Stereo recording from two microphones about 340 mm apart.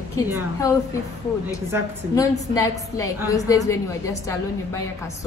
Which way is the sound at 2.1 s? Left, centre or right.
Centre.